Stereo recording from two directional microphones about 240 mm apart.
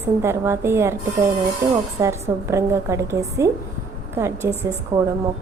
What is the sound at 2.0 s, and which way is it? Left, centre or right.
A woman's voice, centre.